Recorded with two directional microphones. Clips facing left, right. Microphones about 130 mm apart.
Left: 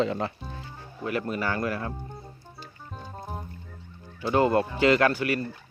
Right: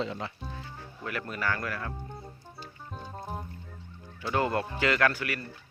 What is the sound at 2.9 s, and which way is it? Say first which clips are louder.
Music: even; centre (ahead or behind).